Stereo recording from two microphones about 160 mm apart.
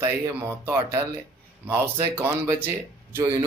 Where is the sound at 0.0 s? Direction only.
15° right (ahead or behind).